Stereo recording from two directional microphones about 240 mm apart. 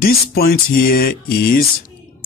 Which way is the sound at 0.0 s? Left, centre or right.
Left.